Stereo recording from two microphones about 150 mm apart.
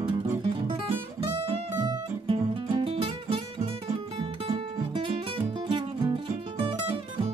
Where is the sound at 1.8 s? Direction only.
30° right (ahead or behind).